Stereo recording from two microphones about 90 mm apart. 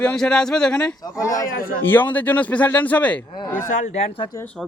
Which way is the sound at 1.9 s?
20° left (ahead or behind).